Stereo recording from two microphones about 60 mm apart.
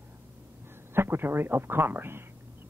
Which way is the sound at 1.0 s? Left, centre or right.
Right.